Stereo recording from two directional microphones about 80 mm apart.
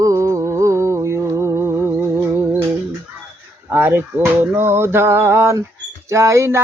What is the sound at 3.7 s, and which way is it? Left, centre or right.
Speech, right.